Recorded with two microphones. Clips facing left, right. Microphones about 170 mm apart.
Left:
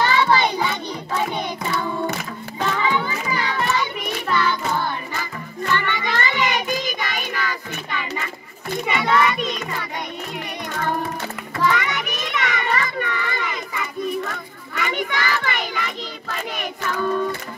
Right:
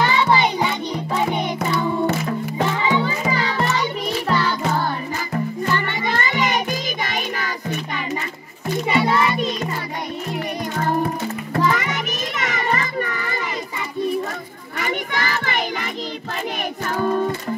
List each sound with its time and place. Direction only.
0.0 s music: 20° right (ahead or behind)
2.8 s music: 20° right (ahead or behind)
3.3 s music: 30° right (ahead or behind)
11.5 s children playing: 40° right (ahead or behind)
14.8 s child singing: 45° right (ahead or behind)
16.8 s music: 40° right (ahead or behind)